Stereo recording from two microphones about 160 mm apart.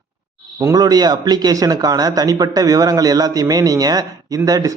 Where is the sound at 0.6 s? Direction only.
20° right (ahead or behind).